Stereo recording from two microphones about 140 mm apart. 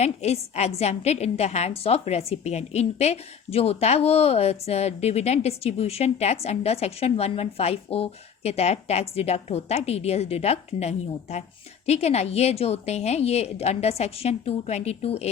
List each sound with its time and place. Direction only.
0.0 s a woman's voice: 50° left (ahead or behind)